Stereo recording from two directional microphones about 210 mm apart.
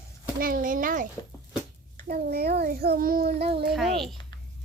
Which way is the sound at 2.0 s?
50° right (ahead or behind).